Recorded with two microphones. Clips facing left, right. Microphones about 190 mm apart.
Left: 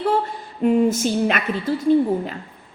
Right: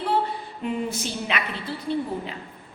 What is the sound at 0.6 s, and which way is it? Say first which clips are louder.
A woman's voice: left 11 dB; 45° left (ahead or behind).